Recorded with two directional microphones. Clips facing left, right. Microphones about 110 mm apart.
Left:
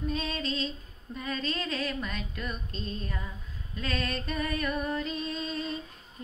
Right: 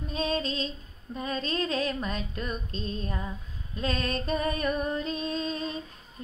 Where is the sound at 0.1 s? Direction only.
25° right (ahead or behind).